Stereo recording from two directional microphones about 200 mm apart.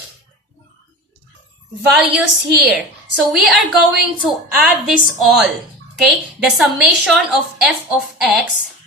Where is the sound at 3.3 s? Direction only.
Centre (ahead or behind).